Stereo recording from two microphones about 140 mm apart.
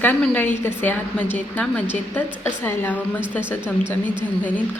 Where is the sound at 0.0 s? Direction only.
10° left (ahead or behind).